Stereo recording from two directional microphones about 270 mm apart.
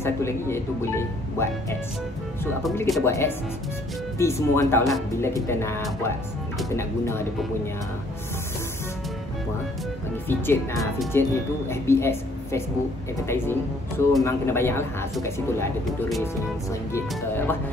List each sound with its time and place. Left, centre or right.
0.0 s a man's voice: centre
10.2 s a man's voice: centre